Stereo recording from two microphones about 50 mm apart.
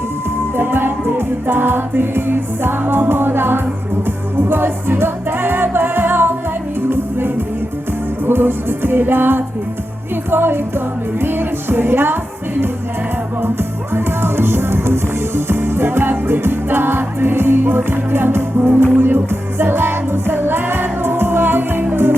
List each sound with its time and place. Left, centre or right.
0.5 s music: right
13.4 s music: right